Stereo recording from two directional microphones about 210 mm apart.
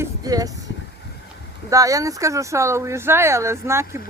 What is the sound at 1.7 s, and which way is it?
Speech, 15° right (ahead or behind).